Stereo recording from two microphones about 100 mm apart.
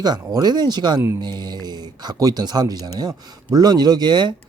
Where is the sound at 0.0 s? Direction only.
45° right (ahead or behind).